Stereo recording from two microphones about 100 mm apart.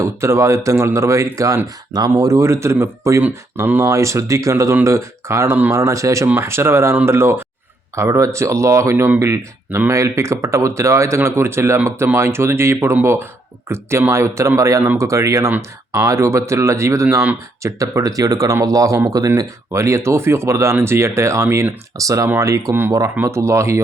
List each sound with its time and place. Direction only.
0.0 s speech: 25° right (ahead or behind)